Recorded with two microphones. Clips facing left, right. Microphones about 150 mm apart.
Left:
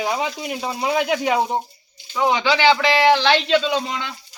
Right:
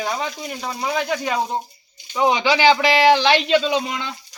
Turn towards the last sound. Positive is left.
turn(degrees=-15)  # may be behind; listen again after turning